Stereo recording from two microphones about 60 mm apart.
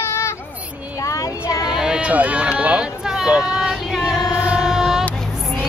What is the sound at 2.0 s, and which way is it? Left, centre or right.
Speech, right.